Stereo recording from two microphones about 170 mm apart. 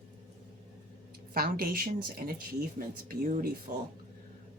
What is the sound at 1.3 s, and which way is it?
Speech, 60° right (ahead or behind).